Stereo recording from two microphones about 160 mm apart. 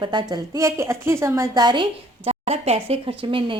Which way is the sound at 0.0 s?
30° right (ahead or behind).